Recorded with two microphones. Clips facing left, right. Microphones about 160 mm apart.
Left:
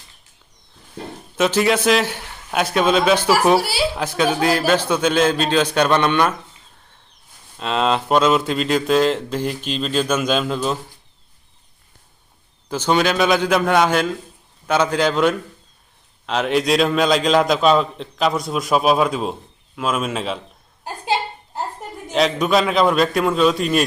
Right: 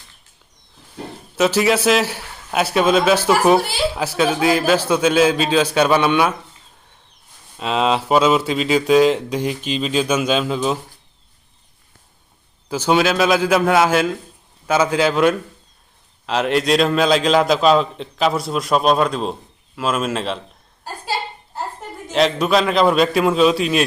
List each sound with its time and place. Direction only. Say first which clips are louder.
1.4 s a man's voice: right 1 dB; centre (ahead or behind)
4.0 s a man's voice: right 2 dB; 5° right (ahead or behind)
7.6 s a man's voice: right 1 dB; 5° right (ahead or behind)
12.6 s a man's voice: right 1 dB; 10° right (ahead or behind)
20.8 s a sound: left 3 dB; 20° left (ahead or behind)
22.1 s a man's voice: right 1 dB; centre (ahead or behind)